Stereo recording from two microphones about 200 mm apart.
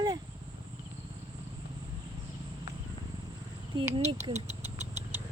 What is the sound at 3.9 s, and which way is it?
Speech, 35° right (ahead or behind).